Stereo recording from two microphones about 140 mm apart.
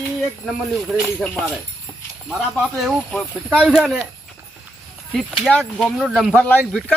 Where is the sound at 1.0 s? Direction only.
10° left (ahead or behind).